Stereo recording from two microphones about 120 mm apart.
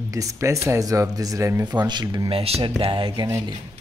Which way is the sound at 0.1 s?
25° right (ahead or behind).